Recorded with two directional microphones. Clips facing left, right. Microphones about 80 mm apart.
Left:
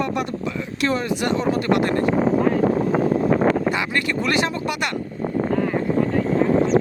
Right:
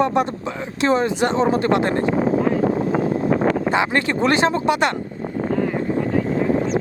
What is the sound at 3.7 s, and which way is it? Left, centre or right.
Speech, right.